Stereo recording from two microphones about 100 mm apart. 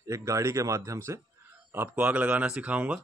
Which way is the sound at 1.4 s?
25° right (ahead or behind).